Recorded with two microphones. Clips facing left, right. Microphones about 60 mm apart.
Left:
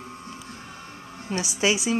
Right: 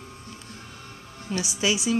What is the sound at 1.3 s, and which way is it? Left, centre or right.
Speech, left.